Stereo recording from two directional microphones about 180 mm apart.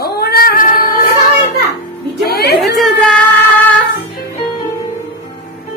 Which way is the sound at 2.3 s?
60° left (ahead or behind).